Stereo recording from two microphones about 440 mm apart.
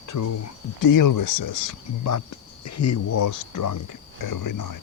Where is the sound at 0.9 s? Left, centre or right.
Left.